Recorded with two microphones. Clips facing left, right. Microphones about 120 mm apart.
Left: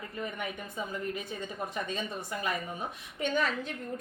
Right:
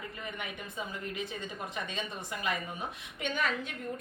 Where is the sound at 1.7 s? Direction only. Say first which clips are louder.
Left 3 dB; 40° left (ahead or behind).